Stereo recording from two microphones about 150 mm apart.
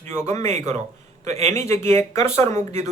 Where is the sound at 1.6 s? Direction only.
15° left (ahead or behind).